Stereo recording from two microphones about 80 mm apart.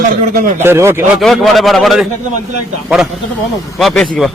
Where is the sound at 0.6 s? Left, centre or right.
Right.